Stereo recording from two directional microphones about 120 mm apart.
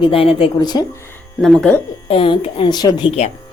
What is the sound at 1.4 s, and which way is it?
Speech, centre (ahead or behind).